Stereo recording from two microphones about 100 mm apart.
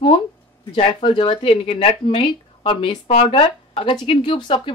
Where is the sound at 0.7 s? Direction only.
60° left (ahead or behind).